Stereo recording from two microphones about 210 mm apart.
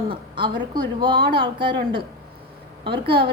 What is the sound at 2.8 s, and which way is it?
Speech, 25° right (ahead or behind).